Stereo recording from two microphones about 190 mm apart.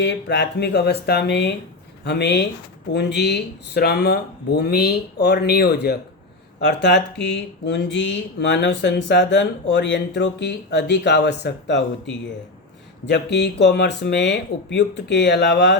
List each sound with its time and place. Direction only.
0.0 s speech: 65° left (ahead or behind)
13.1 s speech: 65° left (ahead or behind)